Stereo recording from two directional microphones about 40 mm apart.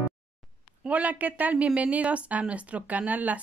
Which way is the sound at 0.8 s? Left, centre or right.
Right.